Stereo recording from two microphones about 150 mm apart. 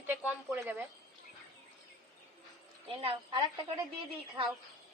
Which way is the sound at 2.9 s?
40° right (ahead or behind).